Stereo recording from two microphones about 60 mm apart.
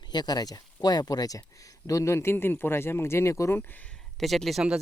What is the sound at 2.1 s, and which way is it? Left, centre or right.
Speech, left.